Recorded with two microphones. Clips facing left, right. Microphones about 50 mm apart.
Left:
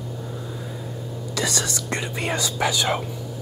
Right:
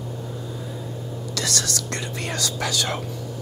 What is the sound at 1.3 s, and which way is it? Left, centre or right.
Speech, centre.